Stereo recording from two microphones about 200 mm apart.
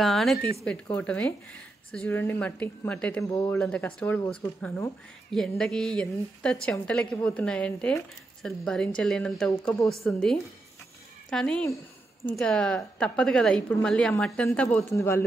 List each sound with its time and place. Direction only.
0.0 s speech: centre (ahead or behind)
3.5 s a woman's voice: 5° left (ahead or behind)
10.0 s a woman's voice: centre (ahead or behind)